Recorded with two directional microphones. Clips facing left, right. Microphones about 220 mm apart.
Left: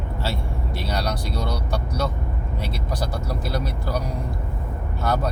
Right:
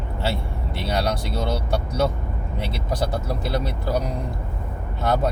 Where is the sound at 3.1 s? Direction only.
25° right (ahead or behind).